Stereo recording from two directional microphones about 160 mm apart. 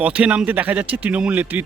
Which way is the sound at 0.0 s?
10° right (ahead or behind).